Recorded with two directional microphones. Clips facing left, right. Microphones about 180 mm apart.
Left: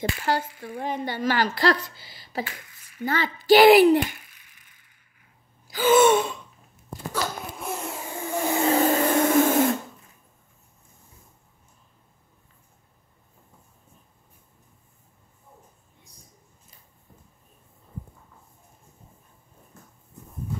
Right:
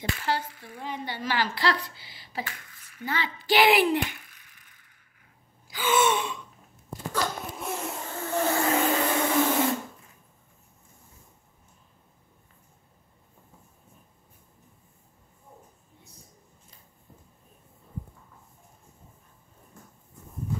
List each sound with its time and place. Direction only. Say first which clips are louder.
0.2 s speech: left 3 dB; 45° left (ahead or behind)
4.3 s a sound: right 1 dB; 10° left (ahead or behind)
5.7 s speech: left 7 dB; 40° left (ahead or behind)
7.1 s a sound: even; 5° left (ahead or behind)
8.1 s vehicle: even; 15° left (ahead or behind)
8.6 s vacuum cleaner: left 4 dB; 40° left (ahead or behind)